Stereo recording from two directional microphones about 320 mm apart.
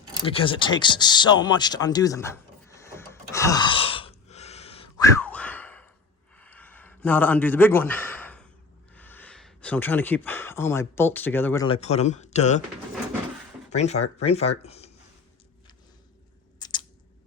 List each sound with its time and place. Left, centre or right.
0.3 s a sound: centre
9.0 s speech: centre; by 12.6 s left
13.7 s speech: left
16.6 s scissors: centre